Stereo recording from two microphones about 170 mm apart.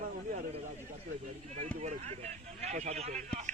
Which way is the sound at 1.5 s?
45° right (ahead or behind).